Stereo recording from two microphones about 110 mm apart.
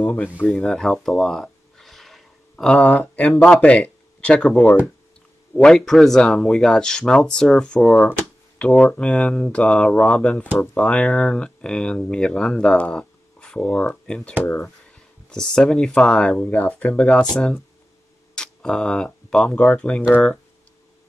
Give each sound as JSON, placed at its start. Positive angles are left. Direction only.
{"t": 0.0, "sound": "speech", "side_deg": 15}
{"t": 0.5, "sound": "speech", "side_deg": 5}